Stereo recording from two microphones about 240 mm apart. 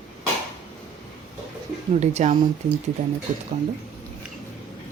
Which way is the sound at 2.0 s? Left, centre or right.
Right.